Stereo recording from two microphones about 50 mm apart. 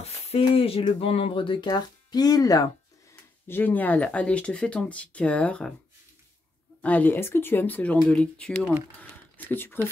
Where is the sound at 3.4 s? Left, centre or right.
Left.